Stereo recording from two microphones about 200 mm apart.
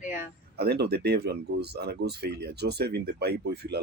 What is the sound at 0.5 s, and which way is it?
Speech, 55° right (ahead or behind).